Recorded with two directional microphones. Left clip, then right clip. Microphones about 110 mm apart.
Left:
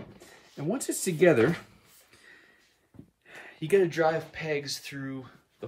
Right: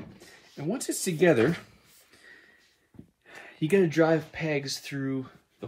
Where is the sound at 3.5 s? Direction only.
50° right (ahead or behind).